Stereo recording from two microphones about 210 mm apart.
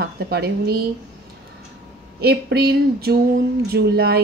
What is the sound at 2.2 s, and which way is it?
A woman's voice, 50° right (ahead or behind).